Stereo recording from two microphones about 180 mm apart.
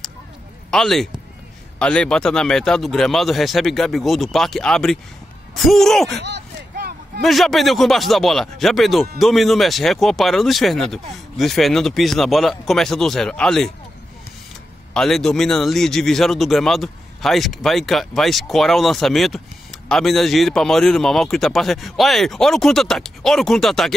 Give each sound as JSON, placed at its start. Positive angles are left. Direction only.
{"t": 0.7, "sound": "a man's voice", "side_deg": 0}
{"t": 6.2, "sound": "a sound", "side_deg": -70}
{"t": 7.2, "sound": "speech", "side_deg": 0}
{"t": 15.0, "sound": "speech", "side_deg": 0}